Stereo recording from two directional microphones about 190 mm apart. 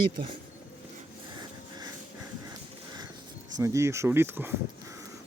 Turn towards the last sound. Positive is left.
turn(degrees=-10)  # may be behind; listen again after turning